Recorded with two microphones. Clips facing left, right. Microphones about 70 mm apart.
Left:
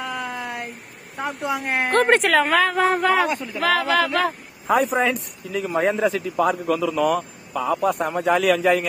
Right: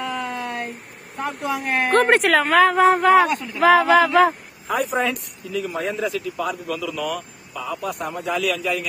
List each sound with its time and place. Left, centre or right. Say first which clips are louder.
0.2 s a sound: right 2 dB; centre
1.4 s speech: right 1 dB; left
1.9 s a woman's voice: right 1 dB; centre
5.0 s speech: left 2 dB; left